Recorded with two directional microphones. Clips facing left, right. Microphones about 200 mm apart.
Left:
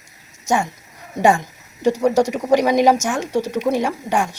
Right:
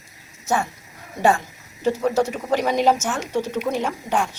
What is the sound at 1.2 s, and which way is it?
Speech, 15° left (ahead or behind).